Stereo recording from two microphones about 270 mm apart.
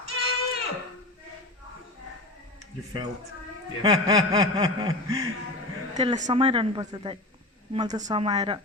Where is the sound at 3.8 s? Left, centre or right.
Centre.